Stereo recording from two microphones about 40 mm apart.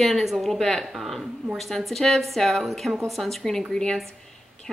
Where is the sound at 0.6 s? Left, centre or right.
Centre.